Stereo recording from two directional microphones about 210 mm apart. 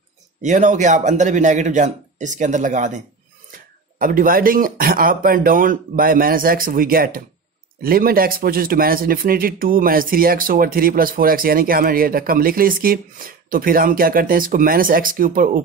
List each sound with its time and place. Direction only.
0.4 s speech: 35° right (ahead or behind)